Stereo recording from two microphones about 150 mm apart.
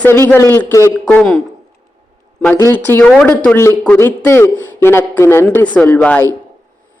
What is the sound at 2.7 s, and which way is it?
A man's voice, 15° left (ahead or behind).